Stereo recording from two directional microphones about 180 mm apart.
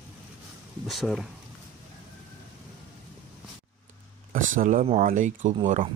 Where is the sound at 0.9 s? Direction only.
Centre (ahead or behind).